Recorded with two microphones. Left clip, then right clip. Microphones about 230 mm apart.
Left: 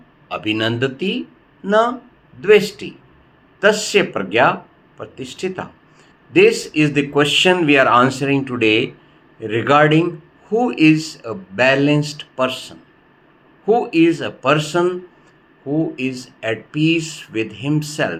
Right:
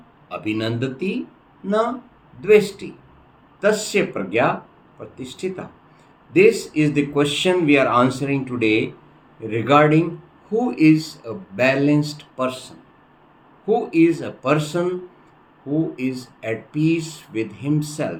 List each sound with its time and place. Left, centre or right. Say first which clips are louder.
0.3 s a man's voice: left 5 dB; centre
16.0 s a man's voice: left 3 dB; centre